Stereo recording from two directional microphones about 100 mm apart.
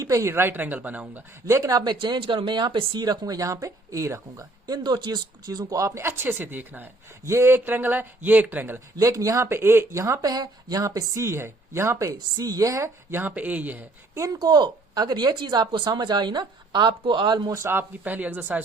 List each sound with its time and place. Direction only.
0.0 s speech: 30° right (ahead or behind); by 1.2 s 15° right (ahead or behind)
1.5 s speech: 35° right (ahead or behind); by 3.0 s 55° right (ahead or behind)
3.0 s speech: 40° right (ahead or behind)
4.6 s speech: 45° right (ahead or behind); by 8.8 s 20° right (ahead or behind)
9.0 s speech: 35° right (ahead or behind); by 13.8 s 15° right (ahead or behind)
14.2 s speech: 40° right (ahead or behind)
17.5 s speech: 25° right (ahead or behind)